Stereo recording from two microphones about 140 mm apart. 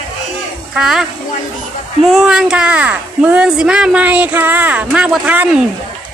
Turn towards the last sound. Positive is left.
turn(degrees=-10)  # may be behind; listen again after turning